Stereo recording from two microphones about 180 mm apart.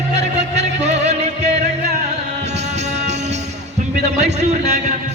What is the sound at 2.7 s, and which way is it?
Music, 40° right (ahead or behind).